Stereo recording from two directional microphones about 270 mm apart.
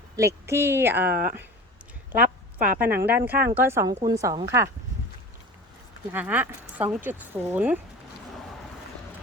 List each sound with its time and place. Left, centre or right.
0.2 s speech: centre
2.1 s a woman's voice: right
3.2 s speech: centre
6.1 s speech: centre